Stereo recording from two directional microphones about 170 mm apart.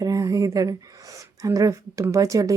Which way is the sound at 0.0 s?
20° right (ahead or behind).